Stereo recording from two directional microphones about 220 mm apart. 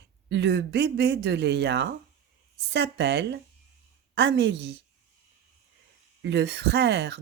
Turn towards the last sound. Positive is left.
turn(degrees=-55)  # may be behind; listen again after turning